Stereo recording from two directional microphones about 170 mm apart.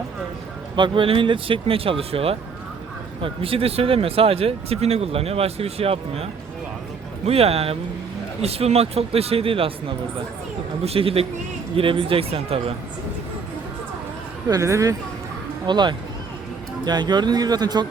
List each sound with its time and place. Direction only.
0.8 s speech: 30° right (ahead or behind)
7.3 s speech: 35° right (ahead or behind)
14.4 s speech: 20° right (ahead or behind)